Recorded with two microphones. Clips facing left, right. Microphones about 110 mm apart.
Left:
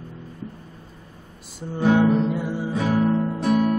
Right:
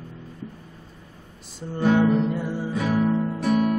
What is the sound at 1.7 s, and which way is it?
Music, 15° left (ahead or behind).